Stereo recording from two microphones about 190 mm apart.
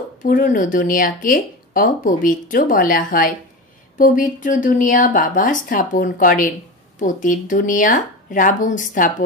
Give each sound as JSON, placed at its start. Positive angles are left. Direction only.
{"t": 0.2, "sound": "speech", "side_deg": 45}